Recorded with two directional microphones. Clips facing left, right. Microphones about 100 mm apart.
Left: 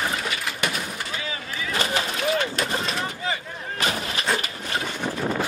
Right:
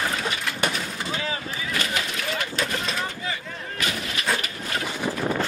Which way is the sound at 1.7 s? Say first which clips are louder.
Left 3 dB; 30° left (ahead or behind).